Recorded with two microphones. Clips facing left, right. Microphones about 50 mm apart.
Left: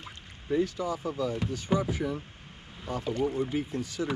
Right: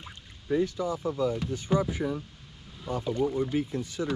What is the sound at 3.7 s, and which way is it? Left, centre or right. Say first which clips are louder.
Speech: right 1 dB; right.